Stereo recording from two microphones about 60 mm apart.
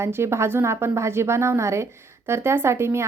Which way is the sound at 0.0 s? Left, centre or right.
Right.